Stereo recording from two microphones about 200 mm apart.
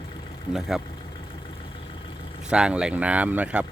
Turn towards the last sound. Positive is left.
turn(degrees=-5)  # may be behind; listen again after turning